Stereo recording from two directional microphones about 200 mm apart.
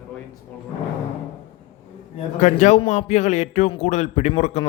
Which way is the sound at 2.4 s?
35° left (ahead or behind).